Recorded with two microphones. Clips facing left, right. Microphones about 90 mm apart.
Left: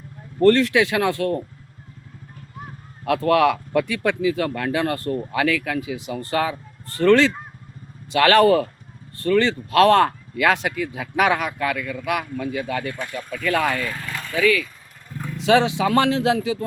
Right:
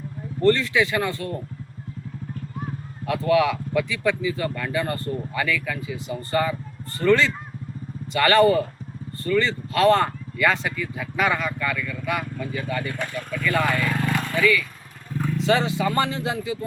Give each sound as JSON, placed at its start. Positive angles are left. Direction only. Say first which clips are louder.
{"t": 0.3, "sound": "speech", "louder": "left 4 dB", "side_deg": 70}
{"t": 3.1, "sound": "speech", "louder": "left 3 dB", "side_deg": 65}
{"t": 14.0, "sound": "vehicle", "louder": "right 7 dB", "side_deg": -20}
{"t": 15.1, "sound": "vehicle", "louder": "right 5 dB", "side_deg": 0}
{"t": 15.4, "sound": "speech", "louder": "left 5 dB", "side_deg": 75}